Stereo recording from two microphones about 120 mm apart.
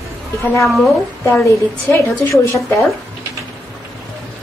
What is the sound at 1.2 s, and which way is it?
A woman's voice, 15° left (ahead or behind).